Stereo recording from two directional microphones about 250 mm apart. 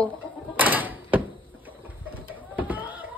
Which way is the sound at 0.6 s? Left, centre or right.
Centre.